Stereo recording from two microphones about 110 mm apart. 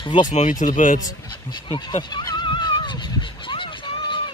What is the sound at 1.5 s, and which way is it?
Speech, 45° left (ahead or behind).